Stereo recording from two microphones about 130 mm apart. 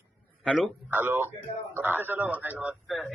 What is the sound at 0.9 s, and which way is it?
A man's voice, 15° right (ahead or behind).